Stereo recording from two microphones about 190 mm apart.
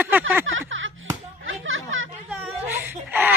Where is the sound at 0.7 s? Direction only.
90° right.